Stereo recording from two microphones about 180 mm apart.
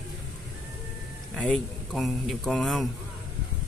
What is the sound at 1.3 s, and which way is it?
Speech, 5° left (ahead or behind).